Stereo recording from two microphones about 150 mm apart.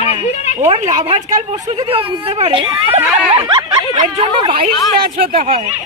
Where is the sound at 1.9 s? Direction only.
35° right (ahead or behind).